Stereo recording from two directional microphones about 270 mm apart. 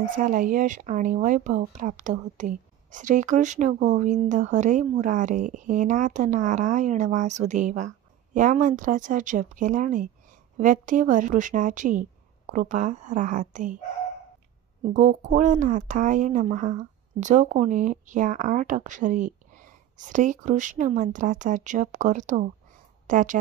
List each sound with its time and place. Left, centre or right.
0.1 s speech: right
14.9 s speech: right